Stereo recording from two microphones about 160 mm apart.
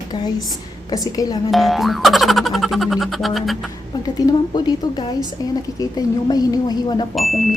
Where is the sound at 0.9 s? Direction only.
25° left (ahead or behind).